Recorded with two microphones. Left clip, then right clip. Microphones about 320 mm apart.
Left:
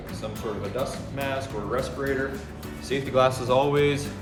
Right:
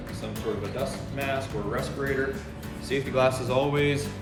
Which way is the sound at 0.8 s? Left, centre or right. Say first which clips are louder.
Left 1 dB; centre.